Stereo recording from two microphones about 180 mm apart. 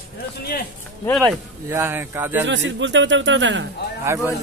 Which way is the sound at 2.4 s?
90° right.